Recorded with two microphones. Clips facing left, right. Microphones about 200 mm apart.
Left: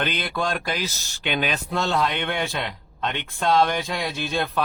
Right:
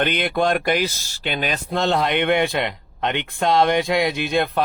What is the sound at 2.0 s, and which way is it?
A man's voice, 65° right (ahead or behind).